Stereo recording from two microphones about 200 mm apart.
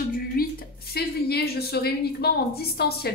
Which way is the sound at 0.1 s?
50° left (ahead or behind).